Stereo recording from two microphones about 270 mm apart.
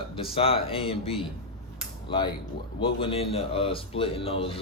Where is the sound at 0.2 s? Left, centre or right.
Centre.